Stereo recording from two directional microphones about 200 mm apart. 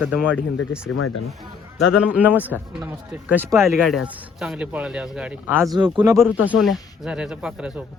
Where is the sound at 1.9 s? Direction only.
5° right (ahead or behind).